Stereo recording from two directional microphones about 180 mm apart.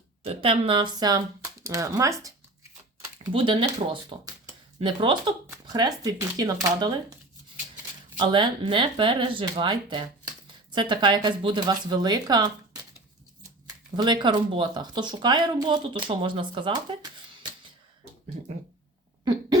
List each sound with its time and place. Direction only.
0.2 s speech: 30° right (ahead or behind)
3.3 s speech: 30° right (ahead or behind)
8.2 s speech: 25° right (ahead or behind)
13.9 s speech: 25° right (ahead or behind)
19.2 s a sound: 25° right (ahead or behind)